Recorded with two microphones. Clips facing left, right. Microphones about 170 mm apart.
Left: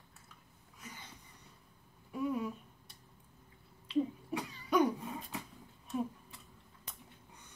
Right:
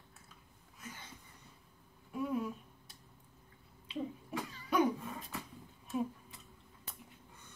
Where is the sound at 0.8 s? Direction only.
Centre (ahead or behind).